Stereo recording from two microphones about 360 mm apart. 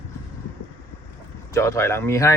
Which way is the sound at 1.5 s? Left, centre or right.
Centre.